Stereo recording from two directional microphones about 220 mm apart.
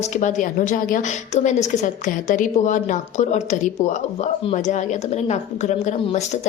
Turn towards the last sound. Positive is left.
turn(degrees=30)  # may be behind; listen again after turning